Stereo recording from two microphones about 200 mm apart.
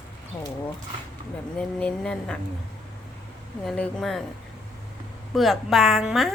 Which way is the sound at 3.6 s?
5° left (ahead or behind).